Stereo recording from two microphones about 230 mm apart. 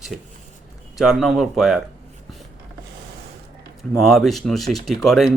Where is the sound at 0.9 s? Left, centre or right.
Centre.